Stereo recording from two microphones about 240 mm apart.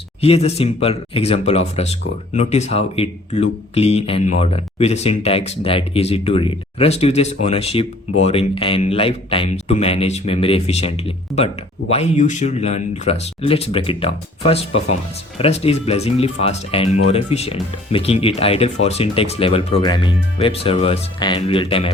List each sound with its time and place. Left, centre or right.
0.2 s a man's voice: left